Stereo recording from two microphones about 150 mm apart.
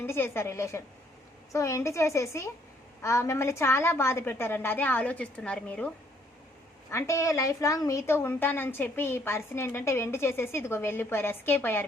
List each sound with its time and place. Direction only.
0.0 s a woman's voice: 15° left (ahead or behind)
6.9 s a woman's voice: 20° left (ahead or behind)